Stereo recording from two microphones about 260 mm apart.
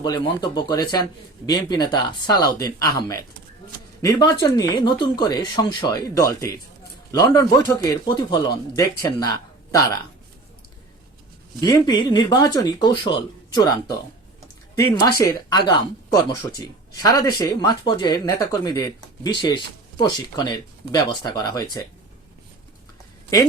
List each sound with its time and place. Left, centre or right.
0.0 s speech: centre
11.6 s speech: centre